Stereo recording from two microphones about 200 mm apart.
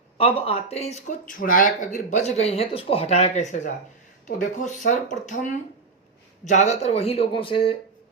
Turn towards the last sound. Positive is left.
turn(degrees=25)  # may be behind; listen again after turning